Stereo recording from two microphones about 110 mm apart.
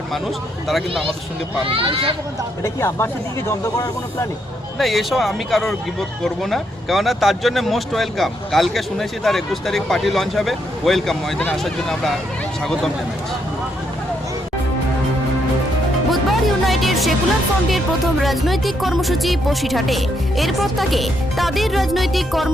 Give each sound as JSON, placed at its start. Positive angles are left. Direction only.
{"t": 0.1, "sound": "speech", "side_deg": 0}
{"t": 1.6, "sound": "speech", "side_deg": -55}
{"t": 2.6, "sound": "speech", "side_deg": 25}
{"t": 4.8, "sound": "speech", "side_deg": 0}
{"t": 16.0, "sound": "music", "side_deg": 0}
{"t": 17.7, "sound": "speech", "side_deg": 0}